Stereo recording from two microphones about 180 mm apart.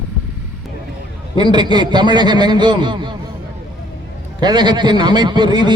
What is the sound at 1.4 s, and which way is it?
A man's voice, 25° right (ahead or behind).